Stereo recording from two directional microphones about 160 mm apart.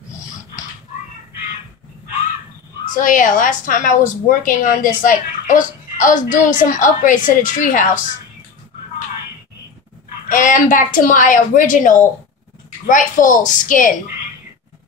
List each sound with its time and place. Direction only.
3.0 s a woman's voice: 55° left (ahead or behind)
10.2 s a woman's voice: 55° left (ahead or behind)